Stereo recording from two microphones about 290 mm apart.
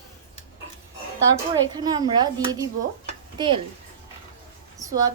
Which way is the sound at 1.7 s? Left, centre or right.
Centre.